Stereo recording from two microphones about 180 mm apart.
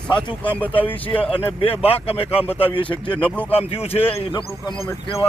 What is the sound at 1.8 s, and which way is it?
A man's voice, 35° left (ahead or behind).